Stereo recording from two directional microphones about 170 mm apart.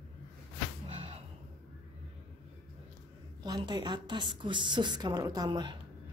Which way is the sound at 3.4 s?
25° right (ahead or behind).